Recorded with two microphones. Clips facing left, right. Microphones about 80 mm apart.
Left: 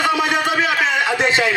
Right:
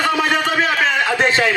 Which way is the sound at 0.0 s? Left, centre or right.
Right.